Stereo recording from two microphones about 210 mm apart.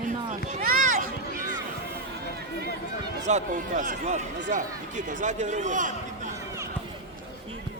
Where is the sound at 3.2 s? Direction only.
35° right (ahead or behind).